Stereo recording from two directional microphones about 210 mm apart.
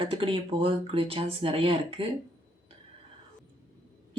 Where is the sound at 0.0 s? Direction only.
25° right (ahead or behind).